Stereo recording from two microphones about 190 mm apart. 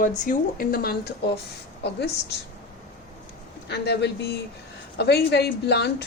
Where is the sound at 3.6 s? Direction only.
60° left (ahead or behind).